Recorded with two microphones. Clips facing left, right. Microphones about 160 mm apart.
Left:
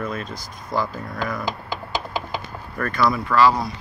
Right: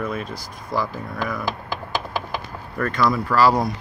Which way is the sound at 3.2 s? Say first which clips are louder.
Left 1 dB; 40° right (ahead or behind).